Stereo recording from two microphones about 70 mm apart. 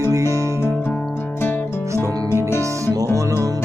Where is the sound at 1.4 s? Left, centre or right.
Left.